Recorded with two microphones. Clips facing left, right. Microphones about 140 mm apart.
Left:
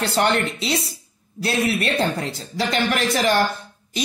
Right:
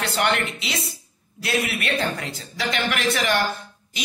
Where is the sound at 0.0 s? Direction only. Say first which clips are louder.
Left 3 dB; 35° left (ahead or behind).